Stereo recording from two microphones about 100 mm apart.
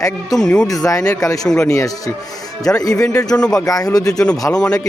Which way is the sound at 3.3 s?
10° left (ahead or behind).